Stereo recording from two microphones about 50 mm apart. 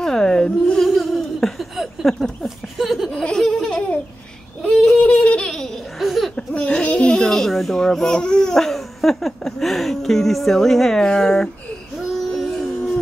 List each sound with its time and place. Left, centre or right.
0.0 s a sound: centre
0.8 s a sound: centre
3.3 s baby laughter: centre
5.0 s laughter: left
5.9 s laughter: centre
6.7 s baby cry: centre
12.3 s music: centre